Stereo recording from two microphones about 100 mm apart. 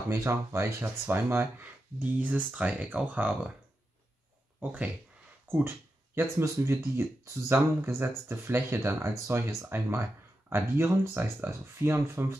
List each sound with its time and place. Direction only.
0.1 s speech: 25° right (ahead or behind)
4.6 s speech: 15° right (ahead or behind)